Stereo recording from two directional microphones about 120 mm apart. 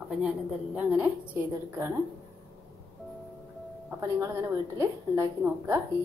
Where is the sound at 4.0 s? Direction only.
25° right (ahead or behind).